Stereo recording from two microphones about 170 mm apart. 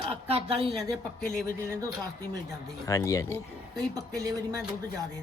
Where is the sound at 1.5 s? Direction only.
20° right (ahead or behind).